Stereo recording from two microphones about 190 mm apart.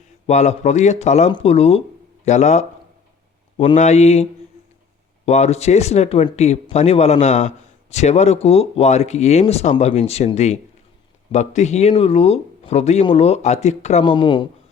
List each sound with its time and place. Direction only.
0.3 s speech: 35° left (ahead or behind)
3.8 s speech: 35° left (ahead or behind)